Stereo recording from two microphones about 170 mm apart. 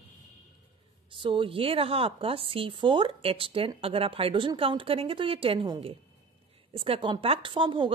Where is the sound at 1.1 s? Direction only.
30° right (ahead or behind).